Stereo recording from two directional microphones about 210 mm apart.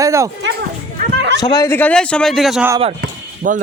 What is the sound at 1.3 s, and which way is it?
Speech, 20° left (ahead or behind).